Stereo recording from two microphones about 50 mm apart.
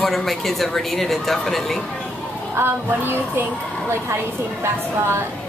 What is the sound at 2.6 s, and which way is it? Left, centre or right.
Music, right.